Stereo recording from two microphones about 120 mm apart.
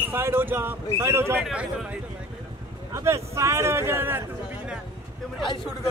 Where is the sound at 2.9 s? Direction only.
25° right (ahead or behind).